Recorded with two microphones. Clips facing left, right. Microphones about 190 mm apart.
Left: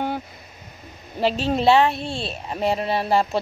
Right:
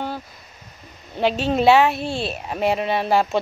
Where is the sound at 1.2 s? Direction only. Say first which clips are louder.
Right 2 dB; centre (ahead or behind).